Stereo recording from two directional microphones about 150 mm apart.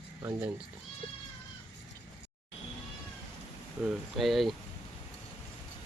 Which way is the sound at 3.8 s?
Centre (ahead or behind).